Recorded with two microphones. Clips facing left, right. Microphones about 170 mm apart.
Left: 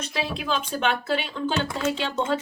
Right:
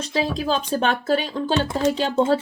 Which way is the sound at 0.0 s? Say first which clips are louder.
Right 6 dB; 35° right (ahead or behind).